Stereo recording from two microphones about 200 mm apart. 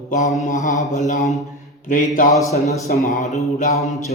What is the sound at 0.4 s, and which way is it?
Mantra, 40° left (ahead or behind).